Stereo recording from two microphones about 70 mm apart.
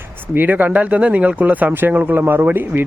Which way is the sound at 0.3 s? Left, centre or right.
Right.